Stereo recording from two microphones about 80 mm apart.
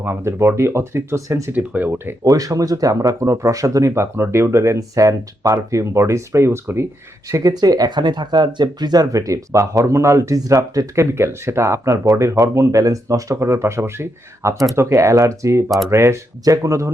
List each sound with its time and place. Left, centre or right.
0.0 s speech: right
1.5 s speech: right
2.2 s speech: right
7.5 s speech: right